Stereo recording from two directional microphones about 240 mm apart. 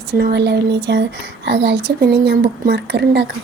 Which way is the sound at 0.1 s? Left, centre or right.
Right.